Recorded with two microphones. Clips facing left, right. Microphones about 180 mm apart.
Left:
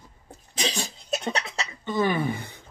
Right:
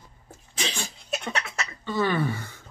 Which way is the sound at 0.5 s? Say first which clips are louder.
Left 3 dB; 40° left (ahead or behind).